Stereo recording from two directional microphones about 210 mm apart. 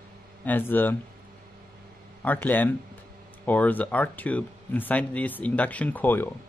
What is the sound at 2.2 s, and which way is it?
Speech, 10° left (ahead or behind).